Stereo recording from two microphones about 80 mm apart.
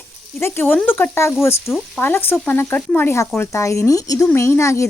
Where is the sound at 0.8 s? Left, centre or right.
Left.